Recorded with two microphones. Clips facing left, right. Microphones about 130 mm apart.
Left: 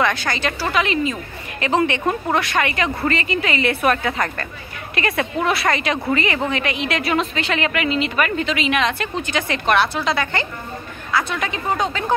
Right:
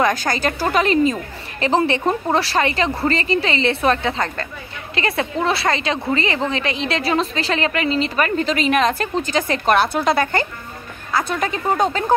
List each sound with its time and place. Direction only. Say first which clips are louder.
0.0 s a woman's voice: right 2 dB; 40° right (ahead or behind)